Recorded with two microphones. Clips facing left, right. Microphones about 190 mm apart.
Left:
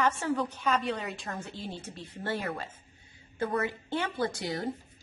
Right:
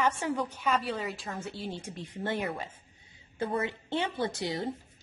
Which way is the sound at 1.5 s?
10° right (ahead or behind).